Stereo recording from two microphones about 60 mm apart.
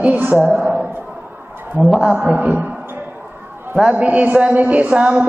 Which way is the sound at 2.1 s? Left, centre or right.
Right.